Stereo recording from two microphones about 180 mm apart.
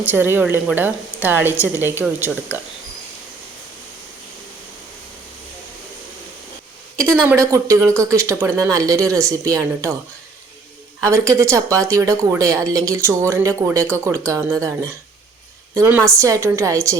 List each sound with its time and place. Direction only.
0.0 s speech: 10° right (ahead or behind)
7.3 s speech: 20° right (ahead or behind)
11.0 s speech: 15° right (ahead or behind)